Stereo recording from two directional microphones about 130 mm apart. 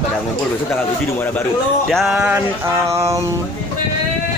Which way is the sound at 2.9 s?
20° right (ahead or behind).